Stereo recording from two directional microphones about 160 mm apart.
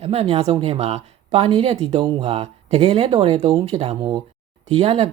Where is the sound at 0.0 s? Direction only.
35° right (ahead or behind).